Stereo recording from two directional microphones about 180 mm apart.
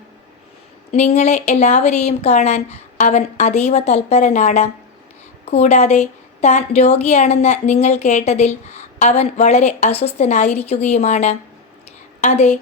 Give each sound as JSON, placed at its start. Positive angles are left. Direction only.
{"t": 0.9, "sound": "a woman's voice", "side_deg": 40}